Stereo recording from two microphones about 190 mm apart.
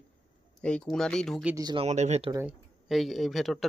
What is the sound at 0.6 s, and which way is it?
Speech, 5° left (ahead or behind).